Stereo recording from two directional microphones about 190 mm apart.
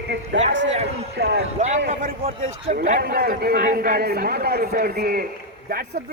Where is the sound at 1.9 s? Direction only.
45° right (ahead or behind).